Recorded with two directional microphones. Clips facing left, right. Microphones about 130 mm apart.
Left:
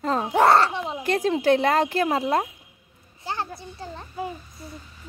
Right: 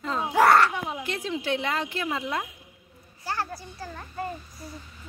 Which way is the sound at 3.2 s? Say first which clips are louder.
Left 1 dB; 20° left (ahead or behind).